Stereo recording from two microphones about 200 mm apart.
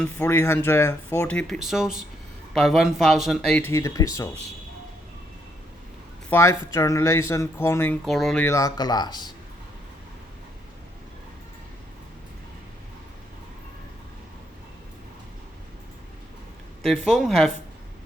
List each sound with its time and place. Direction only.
0.0 s speech: 10° left (ahead or behind)
6.3 s speech: 15° left (ahead or behind)
8.0 s speech: centre (ahead or behind)
8.4 s speech: 15° left (ahead or behind)
16.8 s speech: centre (ahead or behind)